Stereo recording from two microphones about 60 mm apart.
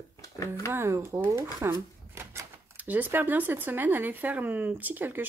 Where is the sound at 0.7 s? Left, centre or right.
Right.